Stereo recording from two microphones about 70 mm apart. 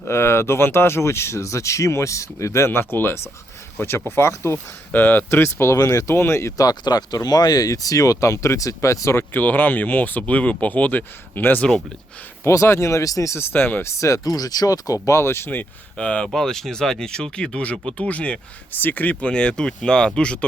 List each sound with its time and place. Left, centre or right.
0.0 s speech: left
4.9 s speech: left
5.7 s speech: left
6.6 s speech: left
9.3 s speech: left
12.4 s speech: left
13.3 s speech: left
13.8 s speech: left
16.0 s speech: centre